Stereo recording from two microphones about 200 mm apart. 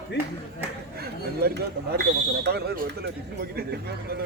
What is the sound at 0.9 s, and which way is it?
Speech, 50° right (ahead or behind).